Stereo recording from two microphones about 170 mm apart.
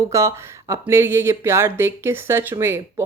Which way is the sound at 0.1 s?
15° right (ahead or behind).